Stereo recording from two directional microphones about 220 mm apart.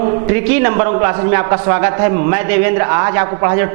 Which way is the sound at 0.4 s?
10° right (ahead or behind).